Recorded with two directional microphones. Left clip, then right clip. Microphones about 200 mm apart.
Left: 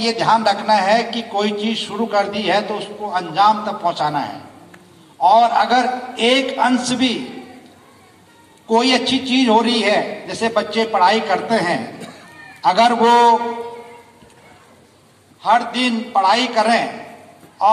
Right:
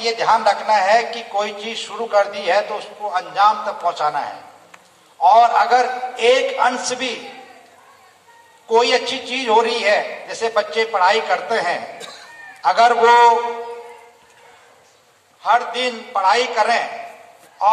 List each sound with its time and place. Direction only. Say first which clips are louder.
0.0 s a man's voice: even; 25° left (ahead or behind)
8.6 s a man's voice: even; 25° left (ahead or behind)
15.4 s a man's voice: left 1 dB; 25° left (ahead or behind)